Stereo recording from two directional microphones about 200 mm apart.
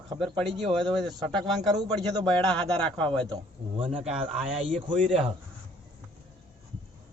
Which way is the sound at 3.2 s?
20° right (ahead or behind).